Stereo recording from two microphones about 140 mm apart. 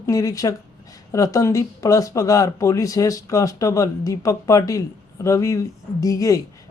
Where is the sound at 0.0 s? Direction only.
25° left (ahead or behind).